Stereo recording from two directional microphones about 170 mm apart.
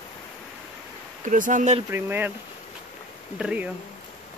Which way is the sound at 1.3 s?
50° right (ahead or behind).